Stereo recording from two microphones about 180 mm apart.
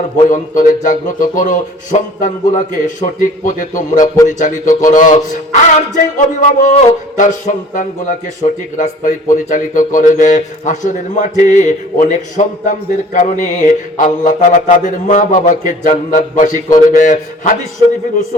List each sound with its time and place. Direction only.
0.2 s mantra: 45° left (ahead or behind)
8.4 s speech: 35° left (ahead or behind)
8.8 s mantra: 45° left (ahead or behind)